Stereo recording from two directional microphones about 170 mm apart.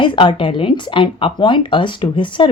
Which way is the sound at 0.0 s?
30° left (ahead or behind).